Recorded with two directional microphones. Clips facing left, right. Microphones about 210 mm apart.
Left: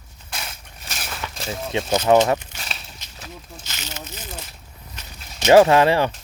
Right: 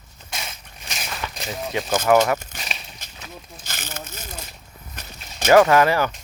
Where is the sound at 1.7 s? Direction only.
25° left (ahead or behind).